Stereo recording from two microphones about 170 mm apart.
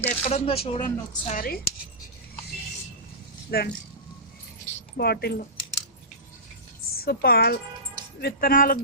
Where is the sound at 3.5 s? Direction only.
65° left (ahead or behind).